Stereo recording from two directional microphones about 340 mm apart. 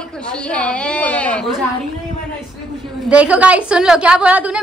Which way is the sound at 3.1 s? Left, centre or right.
Centre.